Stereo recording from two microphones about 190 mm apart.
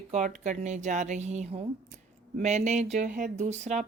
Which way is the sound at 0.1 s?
40° right (ahead or behind).